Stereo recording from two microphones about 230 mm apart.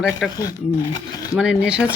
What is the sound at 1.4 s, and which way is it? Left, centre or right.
Speech, centre.